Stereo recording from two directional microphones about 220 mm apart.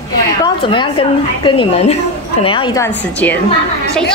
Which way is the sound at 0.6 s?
20° left (ahead or behind).